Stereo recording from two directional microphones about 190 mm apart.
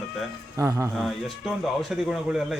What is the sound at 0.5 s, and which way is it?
Speech, 15° right (ahead or behind).